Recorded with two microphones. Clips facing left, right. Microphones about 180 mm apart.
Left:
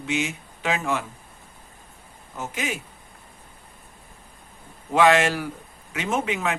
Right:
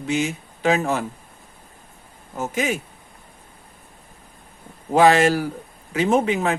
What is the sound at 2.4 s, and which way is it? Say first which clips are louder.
Speech: right 6 dB; 40° right (ahead or behind).